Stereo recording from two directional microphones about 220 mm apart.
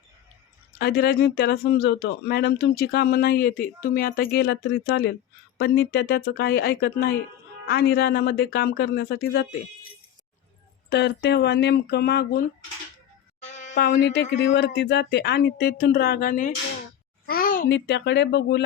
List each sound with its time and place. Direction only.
0.8 s speech: 45° left (ahead or behind)
10.8 s speech: 50° left (ahead or behind)
13.4 s a sound: 30° left (ahead or behind)
13.7 s a child's voice: 50° left (ahead or behind)